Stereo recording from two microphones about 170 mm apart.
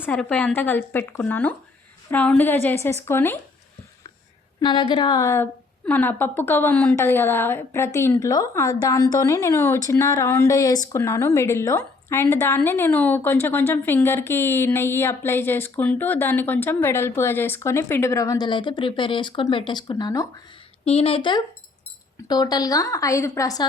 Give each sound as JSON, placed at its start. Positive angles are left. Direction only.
{"t": 0.0, "sound": "a woman's voice", "side_deg": 10}
{"t": 4.6, "sound": "a woman's voice", "side_deg": 25}
{"t": 20.8, "sound": "a woman's voice", "side_deg": 35}